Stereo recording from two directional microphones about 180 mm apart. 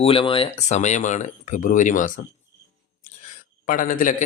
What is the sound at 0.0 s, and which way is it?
A man's voice, 30° left (ahead or behind).